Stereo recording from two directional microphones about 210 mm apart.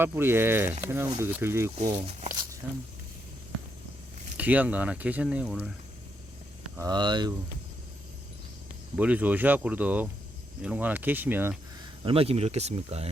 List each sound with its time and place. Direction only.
0.0 s speech: 10° right (ahead or behind)
4.4 s speech: 5° right (ahead or behind)
6.7 s speech: 20° right (ahead or behind)
9.0 s speech: 5° right (ahead or behind)
12.0 s speech: 25° right (ahead or behind)